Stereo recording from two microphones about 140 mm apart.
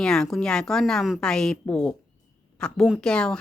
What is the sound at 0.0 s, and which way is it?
A woman's voice, 5° left (ahead or behind).